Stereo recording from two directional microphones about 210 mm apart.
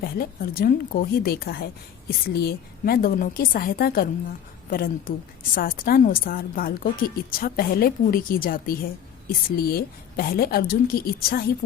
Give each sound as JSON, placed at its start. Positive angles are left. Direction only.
{"t": 0.0, "sound": "a woman's voice", "side_deg": 45}